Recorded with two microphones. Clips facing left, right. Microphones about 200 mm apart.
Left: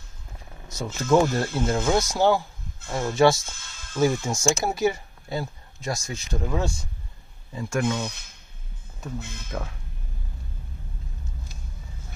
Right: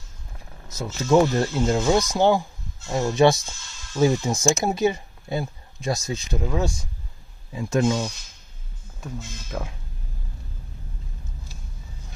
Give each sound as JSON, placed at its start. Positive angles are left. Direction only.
{"t": 1.0, "sound": "speech", "side_deg": -15}
{"t": 3.5, "sound": "music", "side_deg": 55}
{"t": 3.9, "sound": "speech", "side_deg": -20}
{"t": 6.3, "sound": "speech", "side_deg": 0}
{"t": 7.5, "sound": "speech", "side_deg": -20}
{"t": 8.0, "sound": "speech", "side_deg": 60}
{"t": 9.5, "sound": "speech", "side_deg": -10}